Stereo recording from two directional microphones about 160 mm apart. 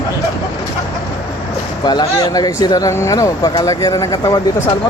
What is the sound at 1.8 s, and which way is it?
Speech, 25° left (ahead or behind).